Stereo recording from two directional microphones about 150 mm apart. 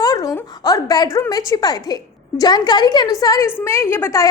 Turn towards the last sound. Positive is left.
turn(degrees=15)  # may be behind; listen again after turning